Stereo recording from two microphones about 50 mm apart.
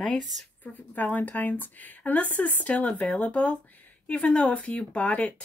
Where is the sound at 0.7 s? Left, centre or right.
Left.